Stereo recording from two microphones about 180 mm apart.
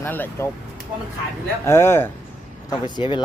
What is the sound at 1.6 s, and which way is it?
Speech, 15° left (ahead or behind).